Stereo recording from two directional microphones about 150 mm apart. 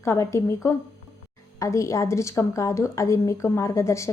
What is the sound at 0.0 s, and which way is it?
A woman's voice, 20° left (ahead or behind).